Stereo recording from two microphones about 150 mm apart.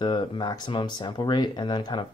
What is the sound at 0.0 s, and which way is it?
Speech, 30° left (ahead or behind).